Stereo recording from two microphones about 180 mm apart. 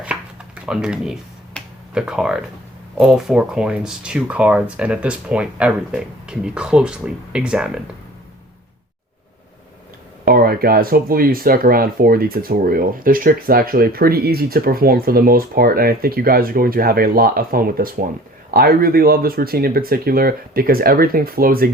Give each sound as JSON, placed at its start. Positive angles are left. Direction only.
{"t": 0.6, "sound": "finger snapping", "side_deg": -5}
{"t": 3.0, "sound": "speech", "side_deg": 0}
{"t": 10.2, "sound": "speech", "side_deg": -55}